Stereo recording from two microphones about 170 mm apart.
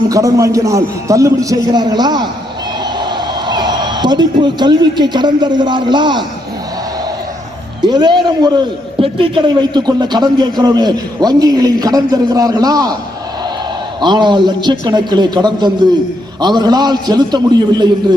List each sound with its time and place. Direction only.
0.1 s a man's voice: 20° right (ahead or behind)
7.8 s a man's voice: 25° right (ahead or behind)
14.0 s a man's voice: 25° right (ahead or behind)